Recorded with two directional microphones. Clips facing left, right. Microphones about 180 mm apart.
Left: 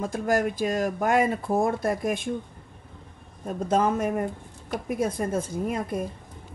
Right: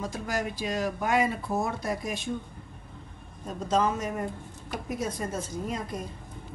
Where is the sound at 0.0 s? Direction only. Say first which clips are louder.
Left 7 dB; 50° left (ahead or behind).